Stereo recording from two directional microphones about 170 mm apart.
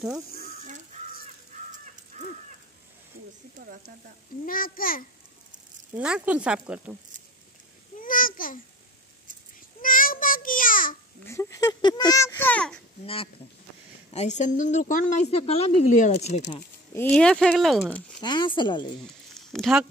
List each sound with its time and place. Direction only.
0.3 s chicken: 65° left (ahead or behind)
1.5 s crow: 45° right (ahead or behind)
2.1 s a sound: 45° right (ahead or behind)
4.5 s a child's voice: 55° left (ahead or behind)
5.9 s speech: 5° right (ahead or behind)
8.0 s babbling: 55° left (ahead or behind)
9.8 s child singing: 55° left (ahead or behind)
11.2 s a child's voice: 20° left (ahead or behind)
13.0 s a woman's voice: 35° left (ahead or behind)
16.9 s speech: 10° left (ahead or behind)
18.2 s a child's voice: 25° left (ahead or behind)
19.3 s a sound: centre (ahead or behind)